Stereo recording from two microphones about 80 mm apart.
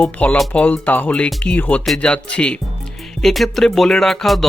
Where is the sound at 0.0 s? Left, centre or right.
Centre.